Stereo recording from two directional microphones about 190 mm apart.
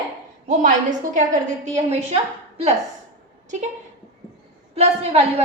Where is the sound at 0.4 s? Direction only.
40° right (ahead or behind).